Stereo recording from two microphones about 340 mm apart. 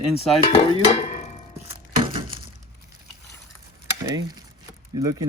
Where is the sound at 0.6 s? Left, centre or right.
Centre.